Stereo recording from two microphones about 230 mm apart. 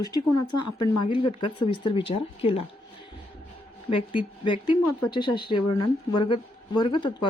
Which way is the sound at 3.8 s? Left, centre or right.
Left.